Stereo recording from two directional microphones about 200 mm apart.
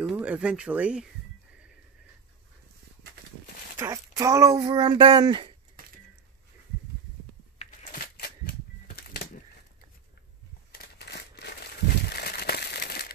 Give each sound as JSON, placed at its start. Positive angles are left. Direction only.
{"t": 0.0, "sound": "speech", "side_deg": -5}
{"t": 3.7, "sound": "speech", "side_deg": -15}
{"t": 7.5, "sound": "a sound", "side_deg": 45}
{"t": 10.7, "sound": "crumpling", "side_deg": 55}